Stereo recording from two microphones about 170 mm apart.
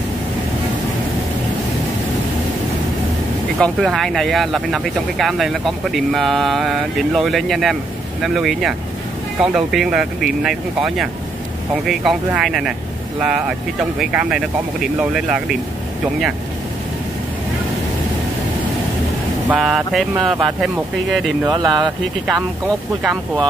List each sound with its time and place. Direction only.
3.5 s speech: 5° left (ahead or behind)
19.5 s speech: 5° right (ahead or behind)
21.5 s speech: 25° right (ahead or behind)